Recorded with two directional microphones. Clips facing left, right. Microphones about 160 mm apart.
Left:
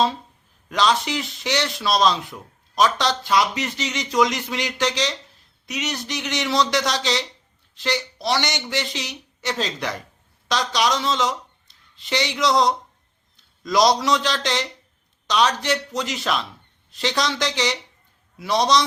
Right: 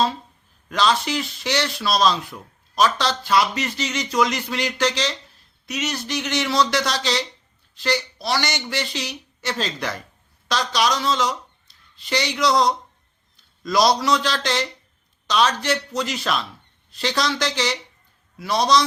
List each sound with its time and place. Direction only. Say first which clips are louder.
0.7 s speech: even; 20° left (ahead or behind)